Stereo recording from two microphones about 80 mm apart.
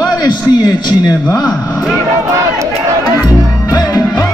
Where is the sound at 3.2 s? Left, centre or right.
Left.